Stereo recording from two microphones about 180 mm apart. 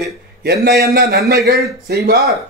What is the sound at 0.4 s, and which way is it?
A man's voice, 60° right (ahead or behind).